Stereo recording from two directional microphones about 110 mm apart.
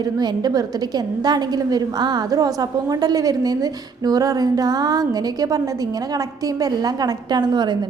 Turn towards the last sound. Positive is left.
turn(degrees=-40)  # may be behind; listen again after turning